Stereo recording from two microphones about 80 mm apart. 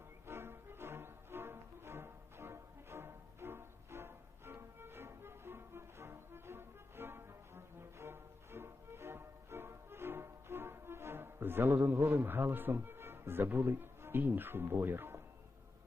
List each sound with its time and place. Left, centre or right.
0.3 s music: right